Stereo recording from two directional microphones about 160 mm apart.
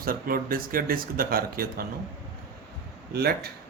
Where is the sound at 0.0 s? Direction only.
65° right (ahead or behind).